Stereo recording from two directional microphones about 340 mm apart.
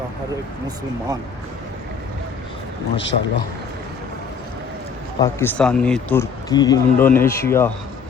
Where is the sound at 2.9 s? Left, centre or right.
Left.